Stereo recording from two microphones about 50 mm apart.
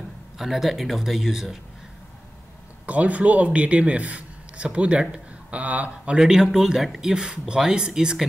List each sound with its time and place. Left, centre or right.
0.4 s speech: centre
2.9 s a man's voice: right
6.1 s speech: centre